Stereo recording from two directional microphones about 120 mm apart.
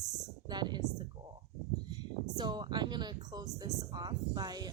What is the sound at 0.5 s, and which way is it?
Speech, 35° right (ahead or behind).